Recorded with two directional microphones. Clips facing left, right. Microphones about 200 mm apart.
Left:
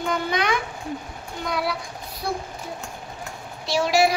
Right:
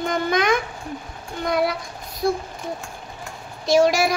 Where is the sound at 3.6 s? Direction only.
45° right (ahead or behind).